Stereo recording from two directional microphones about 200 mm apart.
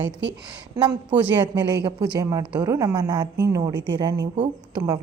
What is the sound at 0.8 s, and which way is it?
A woman's voice, 20° right (ahead or behind).